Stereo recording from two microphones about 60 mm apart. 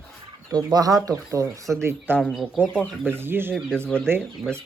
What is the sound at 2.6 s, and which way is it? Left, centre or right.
Speech, left.